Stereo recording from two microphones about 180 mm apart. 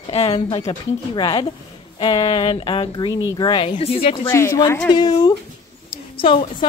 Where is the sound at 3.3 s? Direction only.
25° left (ahead or behind).